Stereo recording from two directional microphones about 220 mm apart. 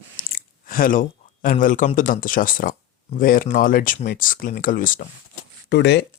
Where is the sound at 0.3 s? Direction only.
40° left (ahead or behind).